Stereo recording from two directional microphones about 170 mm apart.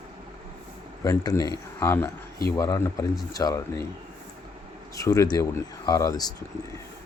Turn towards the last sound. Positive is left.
turn(degrees=20)  # may be behind; listen again after turning